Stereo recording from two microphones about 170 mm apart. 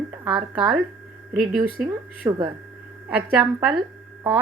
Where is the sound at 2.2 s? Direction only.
20° right (ahead or behind).